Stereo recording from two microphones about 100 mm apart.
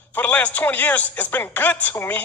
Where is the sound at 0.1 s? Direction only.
15° left (ahead or behind).